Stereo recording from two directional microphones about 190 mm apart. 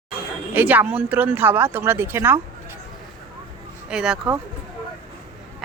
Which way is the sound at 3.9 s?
5° right (ahead or behind).